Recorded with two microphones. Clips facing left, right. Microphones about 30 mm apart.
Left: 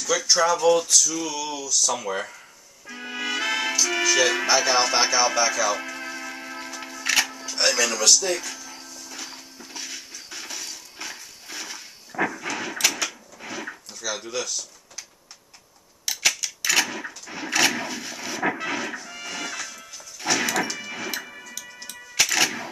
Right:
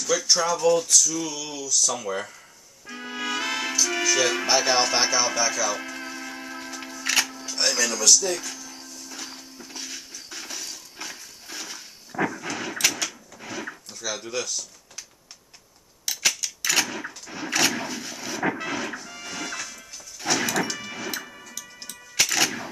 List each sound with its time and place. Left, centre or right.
0.4 s a sound: centre
1.9 s speech: left
3.0 s music: centre
4.5 s music: centre
4.8 s a sound: centre
5.2 s music: centre
7.9 s speech: left
8.5 s music: centre
8.9 s a sound: centre
14.2 s music: centre
16.1 s a sound: centre
18.5 s music: centre